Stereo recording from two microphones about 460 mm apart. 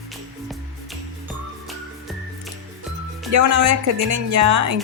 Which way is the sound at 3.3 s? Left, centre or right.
Right.